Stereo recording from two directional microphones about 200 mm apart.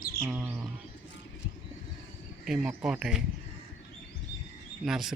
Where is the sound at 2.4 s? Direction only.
5° right (ahead or behind).